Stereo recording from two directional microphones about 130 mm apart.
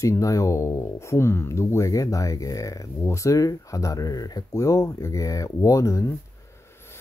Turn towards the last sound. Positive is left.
turn(degrees=25)  # may be behind; listen again after turning